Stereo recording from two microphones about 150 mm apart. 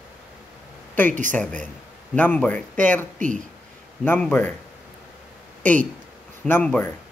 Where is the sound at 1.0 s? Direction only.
60° right (ahead or behind).